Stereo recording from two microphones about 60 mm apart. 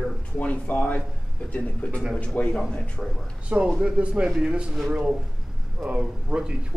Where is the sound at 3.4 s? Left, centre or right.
Centre.